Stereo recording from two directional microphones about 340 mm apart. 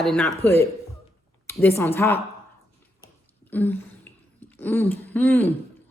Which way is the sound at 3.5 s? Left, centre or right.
Centre.